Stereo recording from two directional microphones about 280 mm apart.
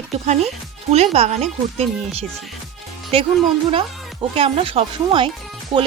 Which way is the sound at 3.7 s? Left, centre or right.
Centre.